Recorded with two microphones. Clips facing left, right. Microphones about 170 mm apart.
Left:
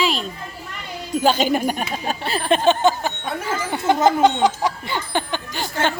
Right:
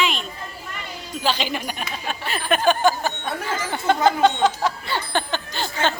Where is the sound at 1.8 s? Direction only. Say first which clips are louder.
Left 4 dB; 35° left (ahead or behind).